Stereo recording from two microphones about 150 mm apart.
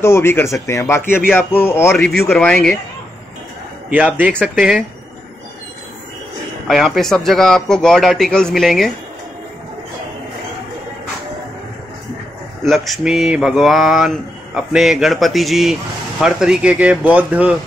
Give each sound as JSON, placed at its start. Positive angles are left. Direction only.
{"t": 0.0, "sound": "a man's voice", "side_deg": 15}
{"t": 2.0, "sound": "a man's voice", "side_deg": 5}
{"t": 3.9, "sound": "speech", "side_deg": -10}
{"t": 6.7, "sound": "speech", "side_deg": 0}
{"t": 12.6, "sound": "speech", "side_deg": 0}